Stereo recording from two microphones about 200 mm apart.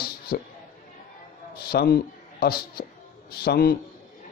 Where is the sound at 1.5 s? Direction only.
50° left (ahead or behind).